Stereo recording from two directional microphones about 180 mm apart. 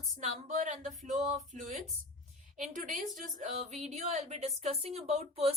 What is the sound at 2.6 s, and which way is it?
A woman's voice, 50° right (ahead or behind).